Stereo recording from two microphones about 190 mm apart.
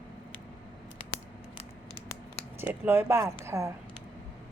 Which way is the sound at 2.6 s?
10° right (ahead or behind).